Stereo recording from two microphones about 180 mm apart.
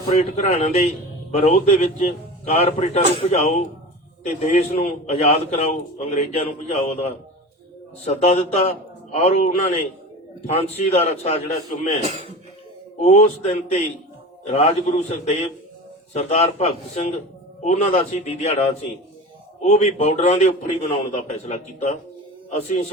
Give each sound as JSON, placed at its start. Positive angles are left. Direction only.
{"t": 0.3, "sound": "a man's voice", "side_deg": 40}
{"t": 12.0, "sound": "speech", "side_deg": -35}
{"t": 13.0, "sound": "a man's voice", "side_deg": 40}
{"t": 19.6, "sound": "a man's voice", "side_deg": 40}